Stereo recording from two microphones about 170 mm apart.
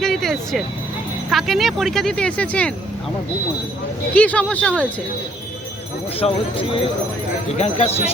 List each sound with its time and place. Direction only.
0.0 s vehicle: centre (ahead or behind)
1.3 s speech: centre (ahead or behind)
4.1 s speech: 10° left (ahead or behind)
6.1 s speech: 35° left (ahead or behind)